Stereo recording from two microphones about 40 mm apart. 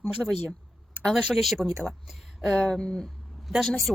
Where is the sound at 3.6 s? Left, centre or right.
Centre.